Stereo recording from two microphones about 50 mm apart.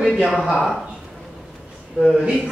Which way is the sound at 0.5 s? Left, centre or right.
Centre.